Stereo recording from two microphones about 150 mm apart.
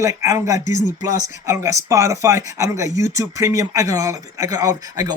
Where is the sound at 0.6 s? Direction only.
55° left (ahead or behind).